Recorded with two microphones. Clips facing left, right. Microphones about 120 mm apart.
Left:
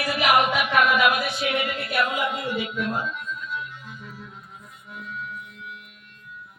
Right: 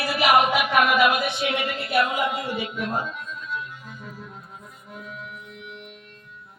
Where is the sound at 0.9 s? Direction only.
25° right (ahead or behind).